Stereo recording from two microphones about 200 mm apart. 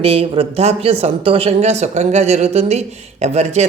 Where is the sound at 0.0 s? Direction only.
30° right (ahead or behind).